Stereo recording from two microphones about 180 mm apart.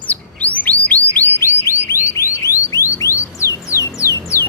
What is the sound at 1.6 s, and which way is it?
Alarm, 15° left (ahead or behind).